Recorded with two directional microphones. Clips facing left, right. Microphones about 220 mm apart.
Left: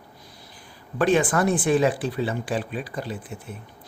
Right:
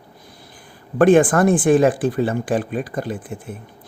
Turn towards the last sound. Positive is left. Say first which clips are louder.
# right 6 dB
turn(degrees=-50)  # may be behind; listen again after turning